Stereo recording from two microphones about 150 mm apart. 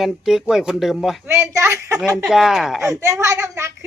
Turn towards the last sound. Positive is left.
turn(degrees=-20)  # may be behind; listen again after turning